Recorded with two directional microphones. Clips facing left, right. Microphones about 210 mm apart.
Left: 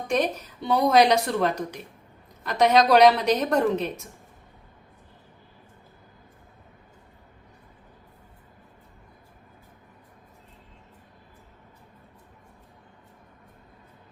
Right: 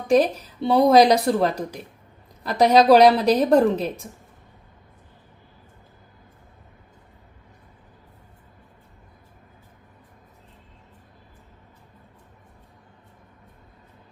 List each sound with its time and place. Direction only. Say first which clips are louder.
0.1 s a woman's voice: right 7 dB; 30° right (ahead or behind)